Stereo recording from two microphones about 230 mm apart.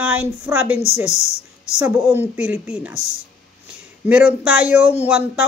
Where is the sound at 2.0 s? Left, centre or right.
Centre.